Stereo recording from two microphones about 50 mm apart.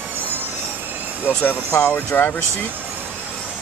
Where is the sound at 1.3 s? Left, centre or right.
Left.